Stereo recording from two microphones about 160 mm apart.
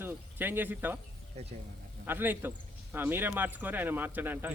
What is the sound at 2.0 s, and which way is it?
A man's voice, 10° right (ahead or behind).